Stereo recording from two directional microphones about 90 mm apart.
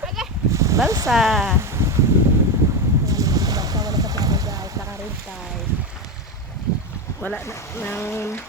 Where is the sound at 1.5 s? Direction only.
30° right (ahead or behind).